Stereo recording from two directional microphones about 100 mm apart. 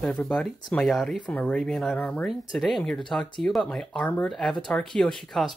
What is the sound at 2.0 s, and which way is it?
Speech, 15° left (ahead or behind).